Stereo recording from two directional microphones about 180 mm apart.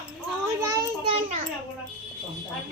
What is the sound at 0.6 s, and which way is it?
Child singing, 15° right (ahead or behind).